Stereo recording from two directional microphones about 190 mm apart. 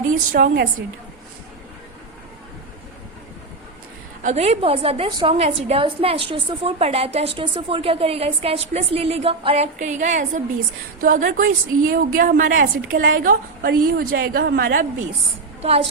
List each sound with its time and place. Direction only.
0.1 s a woman's voice: 45° right (ahead or behind)
4.2 s a woman's voice: 35° right (ahead or behind)